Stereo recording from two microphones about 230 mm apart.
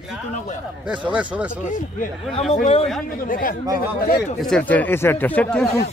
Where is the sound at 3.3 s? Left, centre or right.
Left.